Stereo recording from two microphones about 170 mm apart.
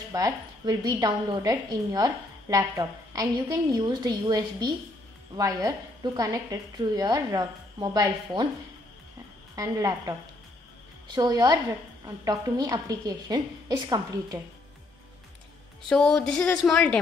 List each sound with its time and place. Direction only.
0.1 s a woman's voice: 20° right (ahead or behind)
9.6 s a woman's voice: 20° right (ahead or behind)
11.1 s a woman's voice: 25° right (ahead or behind)
15.9 s a woman's voice: 5° left (ahead or behind)